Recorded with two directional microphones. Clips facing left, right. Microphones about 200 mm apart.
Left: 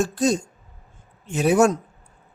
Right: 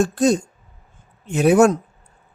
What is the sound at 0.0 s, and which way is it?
Speech, 60° right (ahead or behind).